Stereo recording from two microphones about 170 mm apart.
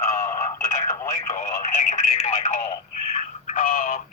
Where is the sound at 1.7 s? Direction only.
45° left (ahead or behind).